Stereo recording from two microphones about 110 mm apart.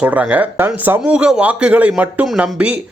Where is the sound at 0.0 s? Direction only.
15° right (ahead or behind).